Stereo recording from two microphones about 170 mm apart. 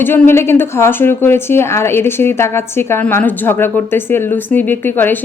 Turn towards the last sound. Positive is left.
turn(degrees=10)  # may be behind; listen again after turning